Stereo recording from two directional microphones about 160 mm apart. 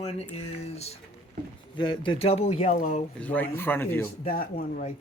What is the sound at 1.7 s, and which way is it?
Speech, 30° left (ahead or behind).